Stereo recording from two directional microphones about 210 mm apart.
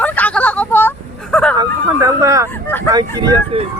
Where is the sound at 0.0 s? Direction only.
5° left (ahead or behind).